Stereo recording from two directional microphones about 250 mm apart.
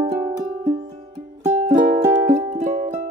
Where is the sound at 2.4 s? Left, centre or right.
Right.